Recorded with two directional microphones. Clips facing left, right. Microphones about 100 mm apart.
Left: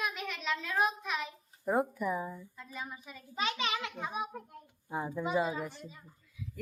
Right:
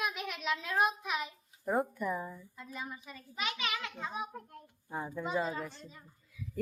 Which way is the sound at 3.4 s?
25° left (ahead or behind).